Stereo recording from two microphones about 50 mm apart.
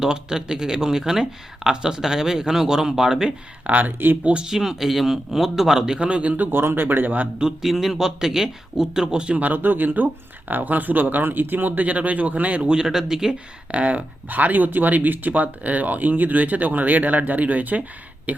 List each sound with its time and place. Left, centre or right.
0.0 s speech: centre
3.7 s speech: right
4.2 s speech: right
4.4 s speech: centre
6.0 s speech: right
6.5 s a man's voice: right
7.3 s speech: centre
9.4 s speech: right
12.7 s speech: centre
13.7 s speech: right